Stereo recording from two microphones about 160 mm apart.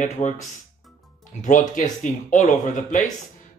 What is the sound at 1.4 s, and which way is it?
Speech, 55° left (ahead or behind).